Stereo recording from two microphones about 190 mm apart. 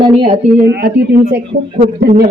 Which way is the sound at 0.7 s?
60° right (ahead or behind).